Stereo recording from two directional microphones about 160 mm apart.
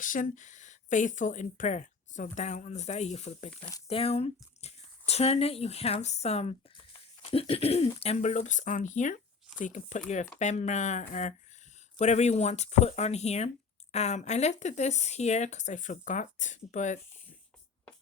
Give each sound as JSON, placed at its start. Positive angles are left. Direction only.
{"t": 0.0, "sound": "speech", "side_deg": 55}